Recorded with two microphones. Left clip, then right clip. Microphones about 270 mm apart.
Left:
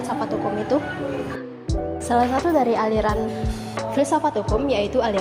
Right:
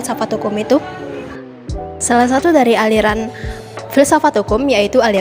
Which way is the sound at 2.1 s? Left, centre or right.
Right.